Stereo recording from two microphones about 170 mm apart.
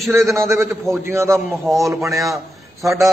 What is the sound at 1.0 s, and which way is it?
A man's voice, 15° right (ahead or behind).